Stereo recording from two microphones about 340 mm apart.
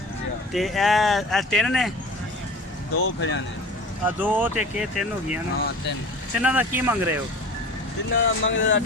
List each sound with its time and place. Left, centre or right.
0.5 s speech: centre
3.0 s speech: left
4.0 s speech: centre
8.1 s speech: left